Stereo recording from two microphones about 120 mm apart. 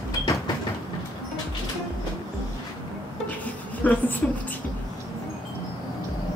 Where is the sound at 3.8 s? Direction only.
15° left (ahead or behind).